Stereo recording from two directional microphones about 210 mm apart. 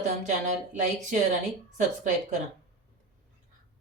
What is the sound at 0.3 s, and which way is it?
Speech, 35° right (ahead or behind).